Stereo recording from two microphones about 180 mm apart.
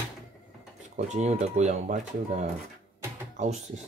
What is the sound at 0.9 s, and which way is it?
Speech, 40° right (ahead or behind).